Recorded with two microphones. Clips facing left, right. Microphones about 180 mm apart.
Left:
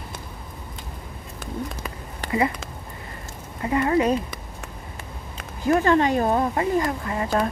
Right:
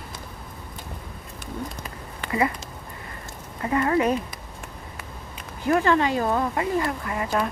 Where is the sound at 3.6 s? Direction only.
25° left (ahead or behind).